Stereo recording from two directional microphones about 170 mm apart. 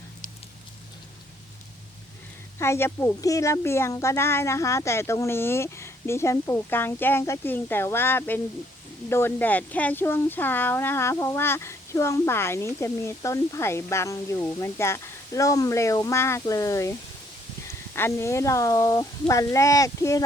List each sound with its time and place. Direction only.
2.6 s a woman's voice: 15° left (ahead or behind)
17.9 s a child's voice: 15° left (ahead or behind)